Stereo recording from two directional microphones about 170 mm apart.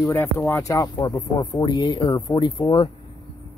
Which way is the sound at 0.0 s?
15° left (ahead or behind).